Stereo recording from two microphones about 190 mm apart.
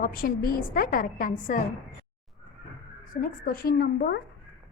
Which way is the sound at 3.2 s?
50° left (ahead or behind).